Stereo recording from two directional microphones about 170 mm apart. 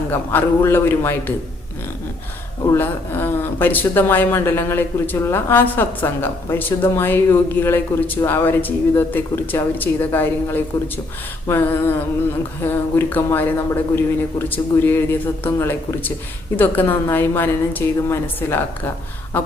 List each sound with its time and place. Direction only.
0.1 s speech: 10° left (ahead or behind)
2.6 s speech: 10° left (ahead or behind)